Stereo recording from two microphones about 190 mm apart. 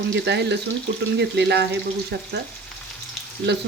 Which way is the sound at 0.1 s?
65° right (ahead or behind).